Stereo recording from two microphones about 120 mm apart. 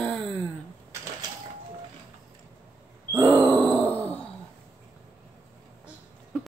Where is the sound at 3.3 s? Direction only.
25° right (ahead or behind).